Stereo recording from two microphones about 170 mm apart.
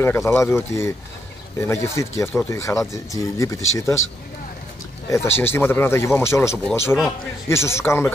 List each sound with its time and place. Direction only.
0.0 s speech: 15° left (ahead or behind)
5.1 s speech: 15° left (ahead or behind)